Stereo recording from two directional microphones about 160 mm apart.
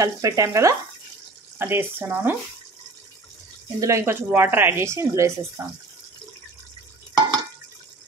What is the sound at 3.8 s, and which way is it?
A woman's voice, 20° right (ahead or behind).